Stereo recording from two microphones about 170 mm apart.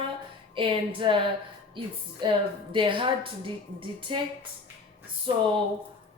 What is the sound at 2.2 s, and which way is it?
A woman's voice, 30° right (ahead or behind).